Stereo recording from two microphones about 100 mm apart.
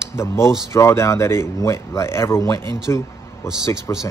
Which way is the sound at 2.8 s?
30° left (ahead or behind).